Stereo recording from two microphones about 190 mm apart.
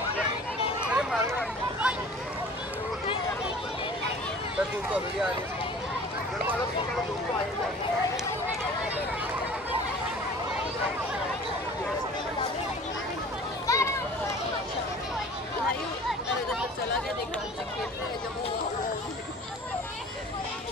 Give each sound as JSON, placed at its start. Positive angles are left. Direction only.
{"t": 0.8, "sound": "a sound", "side_deg": -5}
{"t": 4.6, "sound": "speech", "side_deg": -5}
{"t": 13.7, "sound": "children playing", "side_deg": 15}
{"t": 16.1, "sound": "chatter", "side_deg": -5}